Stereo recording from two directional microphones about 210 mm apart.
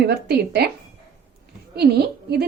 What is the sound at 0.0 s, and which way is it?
Speech, 50° right (ahead or behind).